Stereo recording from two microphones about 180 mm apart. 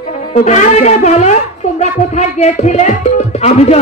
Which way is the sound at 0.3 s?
40° left (ahead or behind).